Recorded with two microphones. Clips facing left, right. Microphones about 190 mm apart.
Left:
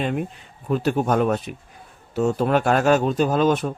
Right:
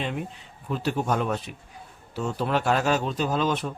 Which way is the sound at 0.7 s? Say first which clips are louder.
Left 6 dB; 50° left (ahead or behind).